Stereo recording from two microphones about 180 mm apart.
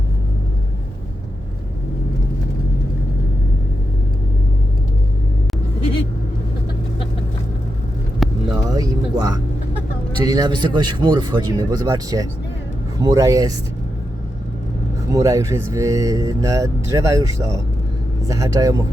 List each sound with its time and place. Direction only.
8.2 s vehicle: centre (ahead or behind)
8.5 s music: 20° right (ahead or behind)
10.2 s speech: 20° right (ahead or behind)
15.1 s speech: 20° right (ahead or behind)